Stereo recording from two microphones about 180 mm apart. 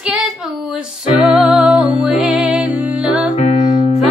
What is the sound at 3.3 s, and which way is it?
Music, 40° left (ahead or behind).